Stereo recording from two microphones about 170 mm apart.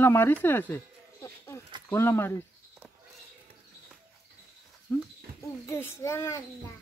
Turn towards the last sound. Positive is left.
turn(degrees=15)  # may be behind; listen again after turning